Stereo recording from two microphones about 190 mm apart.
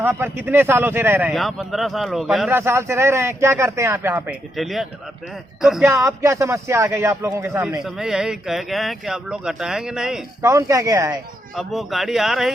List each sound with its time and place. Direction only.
0.0 s speech: 10° right (ahead or behind)
1.3 s speech: centre (ahead or behind)
2.5 s speech: 15° right (ahead or behind)
4.5 s speech: centre (ahead or behind)
5.8 s speech: 15° right (ahead or behind)
7.9 s speech: centre (ahead or behind)
10.4 s speech: 15° right (ahead or behind)
11.5 s speech: centre (ahead or behind)